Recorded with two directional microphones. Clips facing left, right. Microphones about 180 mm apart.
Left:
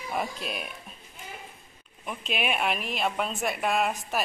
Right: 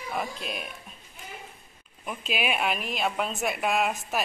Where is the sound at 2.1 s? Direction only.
Centre (ahead or behind).